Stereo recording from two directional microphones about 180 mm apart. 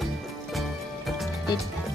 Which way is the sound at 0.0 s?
Centre (ahead or behind).